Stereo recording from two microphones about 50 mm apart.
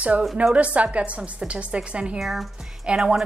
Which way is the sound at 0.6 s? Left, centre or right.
Right.